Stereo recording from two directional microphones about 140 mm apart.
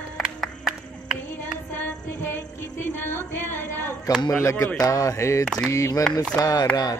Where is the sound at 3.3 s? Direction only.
15° left (ahead or behind).